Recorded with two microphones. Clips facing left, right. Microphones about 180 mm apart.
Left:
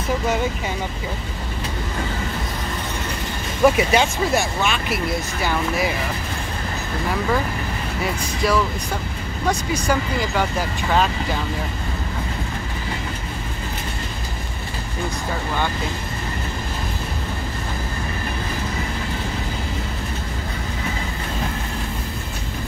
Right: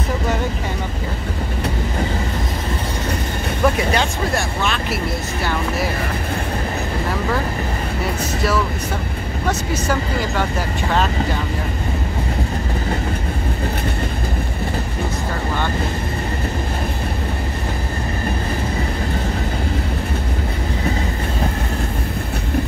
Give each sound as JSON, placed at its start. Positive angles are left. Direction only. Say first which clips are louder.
{"t": 3.6, "sound": "speech", "louder": "left 3 dB", "side_deg": 10}